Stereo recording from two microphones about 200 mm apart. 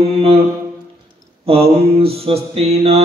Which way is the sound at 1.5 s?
30° right (ahead or behind).